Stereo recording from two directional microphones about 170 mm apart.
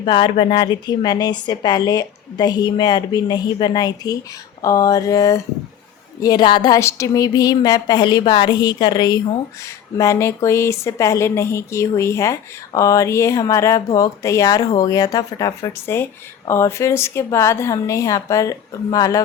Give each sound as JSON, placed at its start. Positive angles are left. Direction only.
{"t": 0.0, "sound": "a woman's voice", "side_deg": 30}